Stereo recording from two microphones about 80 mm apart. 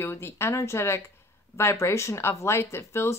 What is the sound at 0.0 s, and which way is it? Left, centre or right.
Speech, left.